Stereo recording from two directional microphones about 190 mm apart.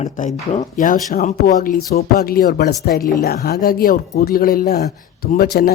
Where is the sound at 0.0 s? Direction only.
35° left (ahead or behind).